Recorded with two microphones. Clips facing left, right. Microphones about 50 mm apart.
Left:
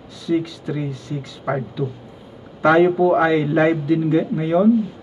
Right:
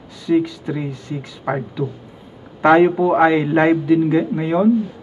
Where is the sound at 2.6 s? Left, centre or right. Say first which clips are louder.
Right 2 dB; right.